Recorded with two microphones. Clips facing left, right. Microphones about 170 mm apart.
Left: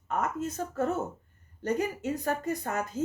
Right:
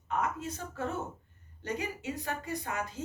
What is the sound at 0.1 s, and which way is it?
A woman's voice, 45° left (ahead or behind).